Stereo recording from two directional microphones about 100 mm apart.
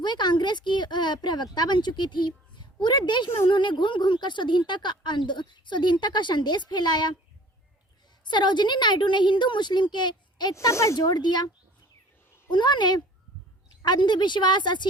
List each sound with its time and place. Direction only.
0.0 s speech: 50° left (ahead or behind)
8.2 s speech: 50° left (ahead or behind)
10.5 s speech: 30° left (ahead or behind); by 11.4 s 45° left (ahead or behind)
12.5 s speech: 50° left (ahead or behind)